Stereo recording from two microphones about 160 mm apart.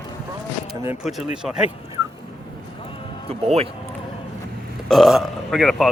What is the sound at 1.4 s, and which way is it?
Speech, 5° right (ahead or behind).